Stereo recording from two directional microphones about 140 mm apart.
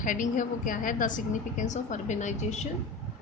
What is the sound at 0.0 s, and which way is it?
A woman's voice, 70° left (ahead or behind).